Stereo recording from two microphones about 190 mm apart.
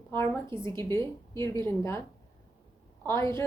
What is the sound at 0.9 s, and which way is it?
A woman's voice, 15° left (ahead or behind).